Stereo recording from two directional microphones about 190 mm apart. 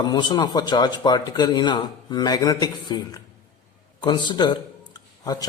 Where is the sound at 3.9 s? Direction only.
25° left (ahead or behind).